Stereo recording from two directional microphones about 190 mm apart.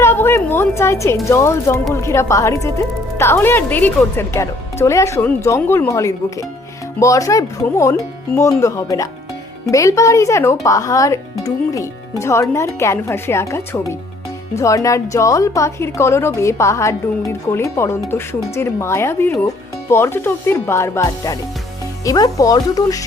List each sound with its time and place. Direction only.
0.0 s a woman's voice: 10° left (ahead or behind)